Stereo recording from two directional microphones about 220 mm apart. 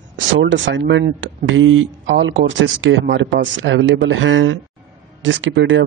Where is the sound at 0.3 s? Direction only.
60° right (ahead or behind).